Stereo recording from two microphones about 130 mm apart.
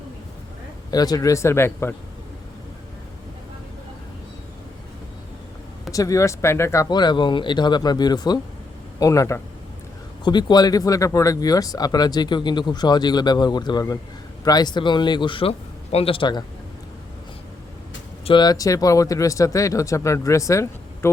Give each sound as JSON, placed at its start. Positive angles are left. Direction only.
{"t": 0.9, "sound": "speech", "side_deg": 30}
{"t": 5.9, "sound": "speech", "side_deg": 25}
{"t": 6.9, "sound": "speech", "side_deg": 35}
{"t": 18.3, "sound": "speech", "side_deg": 35}